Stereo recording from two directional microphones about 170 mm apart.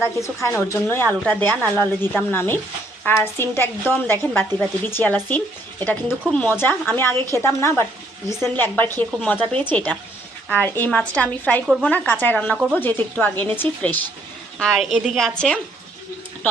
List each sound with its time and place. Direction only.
0.0 s speech: 15° left (ahead or behind)
14.6 s a woman's voice: centre (ahead or behind)